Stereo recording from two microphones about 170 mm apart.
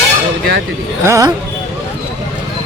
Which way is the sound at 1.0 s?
15° right (ahead or behind).